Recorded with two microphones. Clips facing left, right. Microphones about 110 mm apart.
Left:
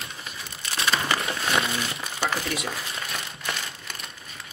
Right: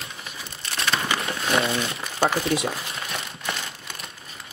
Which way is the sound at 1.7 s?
30° right (ahead or behind).